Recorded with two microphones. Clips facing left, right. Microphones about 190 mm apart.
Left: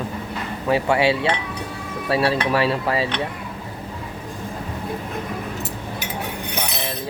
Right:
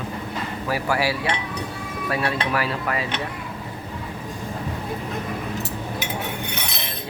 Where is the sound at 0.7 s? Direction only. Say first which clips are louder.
Left 6 dB; 25° left (ahead or behind).